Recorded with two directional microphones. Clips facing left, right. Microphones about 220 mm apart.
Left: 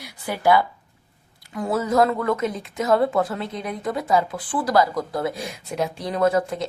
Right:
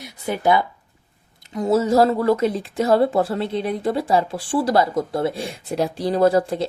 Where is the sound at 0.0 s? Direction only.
25° right (ahead or behind).